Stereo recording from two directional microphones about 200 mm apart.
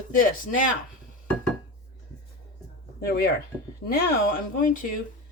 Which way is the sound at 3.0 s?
50° left (ahead or behind).